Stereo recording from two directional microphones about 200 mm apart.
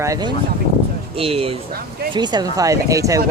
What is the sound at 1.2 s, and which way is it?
Speech, 30° right (ahead or behind).